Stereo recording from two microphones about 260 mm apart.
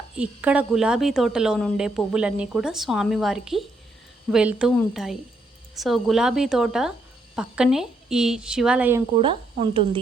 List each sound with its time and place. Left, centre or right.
0.2 s a woman's voice: centre
9.1 s speech: centre